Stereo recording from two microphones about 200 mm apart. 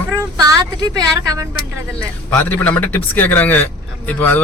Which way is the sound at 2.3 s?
10° left (ahead or behind).